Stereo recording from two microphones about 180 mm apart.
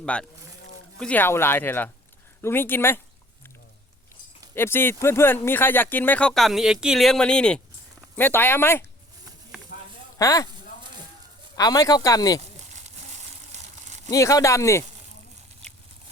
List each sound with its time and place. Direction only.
0.0 s speech: 5° left (ahead or behind)
4.5 s speech: 10° left (ahead or behind)
10.2 s speech: 20° left (ahead or behind)
11.5 s speech: 20° left (ahead or behind)
12.7 s a sound: 40° right (ahead or behind)
14.1 s speech: 20° left (ahead or behind)